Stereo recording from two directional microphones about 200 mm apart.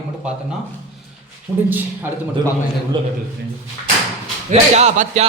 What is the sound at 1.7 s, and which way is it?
Speech, 10° right (ahead or behind).